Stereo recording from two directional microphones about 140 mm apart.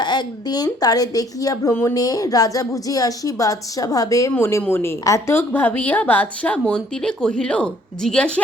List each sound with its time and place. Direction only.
0.0 s a woman's voice: 30° left (ahead or behind); by 8.3 s 5° left (ahead or behind)